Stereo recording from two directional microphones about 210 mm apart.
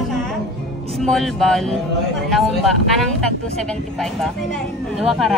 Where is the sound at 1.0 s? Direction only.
Centre (ahead or behind).